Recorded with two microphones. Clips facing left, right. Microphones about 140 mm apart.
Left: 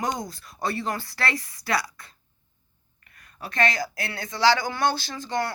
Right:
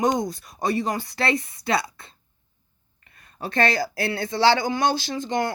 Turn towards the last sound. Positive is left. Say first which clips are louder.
# right 3 dB
turn(degrees=-20)  # may be behind; listen again after turning